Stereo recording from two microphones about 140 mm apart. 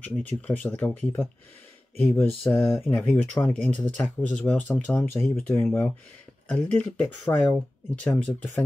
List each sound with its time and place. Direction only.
0.3 s speech: 10° left (ahead or behind)